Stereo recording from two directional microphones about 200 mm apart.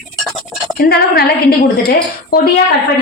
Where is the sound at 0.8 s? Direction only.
50° left (ahead or behind).